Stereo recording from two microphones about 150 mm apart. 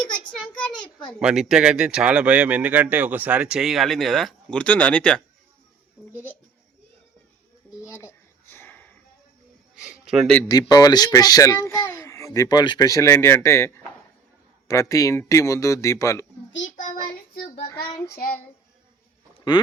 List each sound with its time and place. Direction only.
0.1 s a child's voice: 10° left (ahead or behind)
7.9 s a sound: 20° left (ahead or behind)
9.7 s a sound: 5° right (ahead or behind)
10.5 s a child's voice: 25° left (ahead or behind)
16.6 s child singing: 60° left (ahead or behind); by 17.6 s 80° left
17.7 s a child's voice: 20° left (ahead or behind)
18.2 s a child's voice: 85° left